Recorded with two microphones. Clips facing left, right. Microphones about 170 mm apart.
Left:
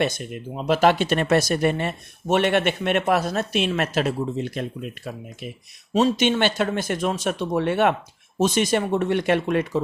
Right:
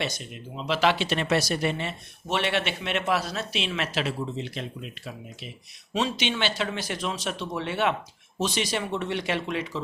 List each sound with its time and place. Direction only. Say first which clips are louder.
0.0 s speech: left 8 dB; 50° left (ahead or behind)